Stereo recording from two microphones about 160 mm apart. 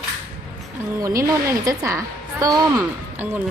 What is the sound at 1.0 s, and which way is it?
A woman's voice, 20° right (ahead or behind).